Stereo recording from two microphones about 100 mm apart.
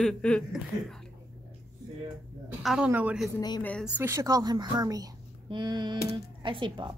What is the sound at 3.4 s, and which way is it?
Speech, 45° left (ahead or behind).